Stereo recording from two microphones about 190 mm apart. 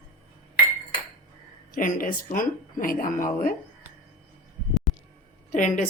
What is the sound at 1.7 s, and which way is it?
Speech, 45° left (ahead or behind).